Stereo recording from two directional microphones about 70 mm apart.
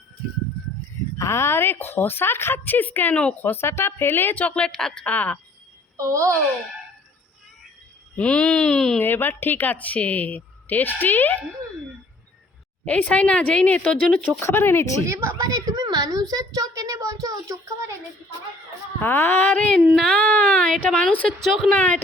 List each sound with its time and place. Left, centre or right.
1.2 s a woman's voice: left
3.5 s a woman's voice: left; by 4.7 s centre
4.7 s a woman's voice: centre
5.0 s a woman's voice: left
6.0 s a child's voice: right
8.1 s speech: centre
9.0 s a woman's voice: left
12.8 s a woman's voice: centre
14.2 s a woman's voice: left
15.0 s a child's voice: right
15.4 s a child's voice: right
18.9 s a woman's voice: left
21.4 s a woman's voice: centre
21.7 s a woman's voice: left